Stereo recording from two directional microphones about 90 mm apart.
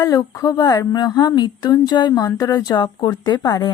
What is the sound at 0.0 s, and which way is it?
Speech, 40° left (ahead or behind).